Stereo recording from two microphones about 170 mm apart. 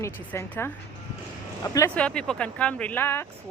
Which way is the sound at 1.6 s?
25° left (ahead or behind).